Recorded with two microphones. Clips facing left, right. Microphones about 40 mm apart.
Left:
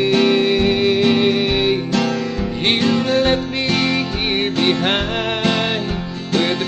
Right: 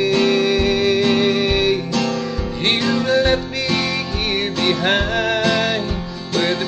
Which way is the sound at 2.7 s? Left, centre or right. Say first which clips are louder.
Even; left.